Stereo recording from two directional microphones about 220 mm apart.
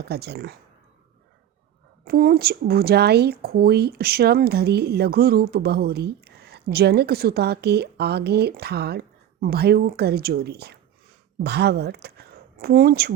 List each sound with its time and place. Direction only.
0.0 s speech: 45° right (ahead or behind)
2.0 s speech: 45° right (ahead or behind)